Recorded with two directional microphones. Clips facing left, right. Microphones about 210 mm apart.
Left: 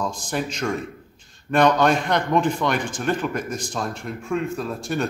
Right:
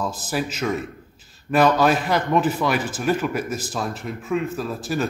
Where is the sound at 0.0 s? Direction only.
5° right (ahead or behind).